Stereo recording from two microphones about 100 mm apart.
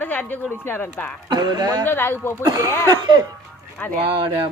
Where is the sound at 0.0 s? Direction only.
15° left (ahead or behind).